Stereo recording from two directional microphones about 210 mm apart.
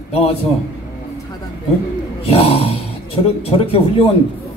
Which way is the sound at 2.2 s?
30° left (ahead or behind).